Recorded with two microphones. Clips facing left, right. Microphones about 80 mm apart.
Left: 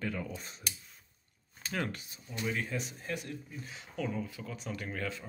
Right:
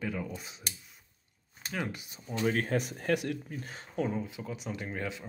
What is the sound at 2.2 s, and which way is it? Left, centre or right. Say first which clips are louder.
Speech: right 6 dB; right.